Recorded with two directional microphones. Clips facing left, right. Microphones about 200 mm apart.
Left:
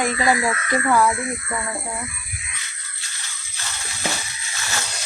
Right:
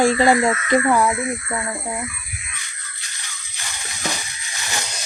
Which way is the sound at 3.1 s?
15° right (ahead or behind).